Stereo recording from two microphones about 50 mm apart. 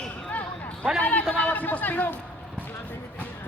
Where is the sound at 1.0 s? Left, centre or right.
Left.